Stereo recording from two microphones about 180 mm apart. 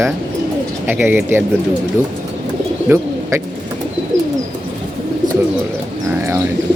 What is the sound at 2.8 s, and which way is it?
Speech, 15° right (ahead or behind).